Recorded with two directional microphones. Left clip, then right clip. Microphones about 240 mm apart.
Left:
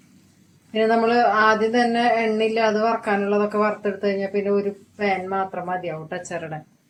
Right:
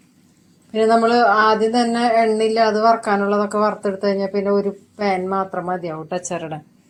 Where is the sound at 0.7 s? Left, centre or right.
Right.